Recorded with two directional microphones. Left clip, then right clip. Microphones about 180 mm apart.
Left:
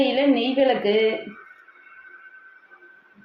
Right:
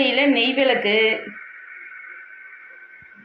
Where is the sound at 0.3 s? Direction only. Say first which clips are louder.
Right 2 dB; 25° left (ahead or behind).